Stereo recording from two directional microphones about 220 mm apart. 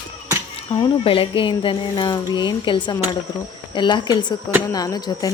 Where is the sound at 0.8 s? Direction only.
25° left (ahead or behind).